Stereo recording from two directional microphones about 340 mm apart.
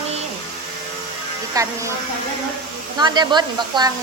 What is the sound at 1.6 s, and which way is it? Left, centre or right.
Speech, centre.